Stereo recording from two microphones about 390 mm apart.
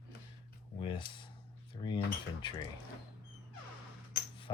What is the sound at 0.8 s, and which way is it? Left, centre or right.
Speech, centre.